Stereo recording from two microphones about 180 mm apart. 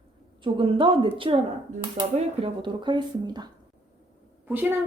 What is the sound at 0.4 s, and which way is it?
Speech, 30° right (ahead or behind).